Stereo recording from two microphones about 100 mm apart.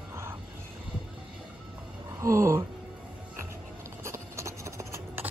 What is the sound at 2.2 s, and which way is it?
Speech, 30° right (ahead or behind).